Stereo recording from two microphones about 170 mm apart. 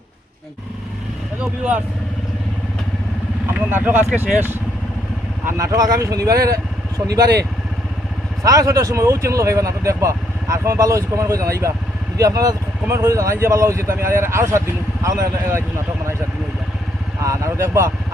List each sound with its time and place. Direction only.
3.5 s speech: 10° right (ahead or behind)
8.4 s speech: 20° right (ahead or behind)
17.2 s speech: 15° right (ahead or behind)